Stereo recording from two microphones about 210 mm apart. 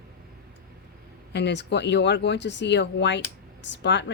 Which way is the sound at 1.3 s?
55° left (ahead or behind).